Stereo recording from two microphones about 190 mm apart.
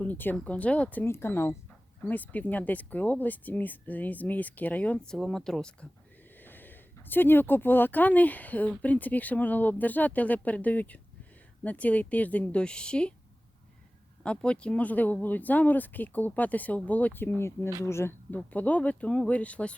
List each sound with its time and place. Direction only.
0.0 s speech: 10° left (ahead or behind)
14.3 s speech: 5° left (ahead or behind)